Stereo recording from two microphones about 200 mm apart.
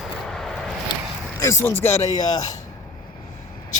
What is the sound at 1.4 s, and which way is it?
Speech, 10° left (ahead or behind).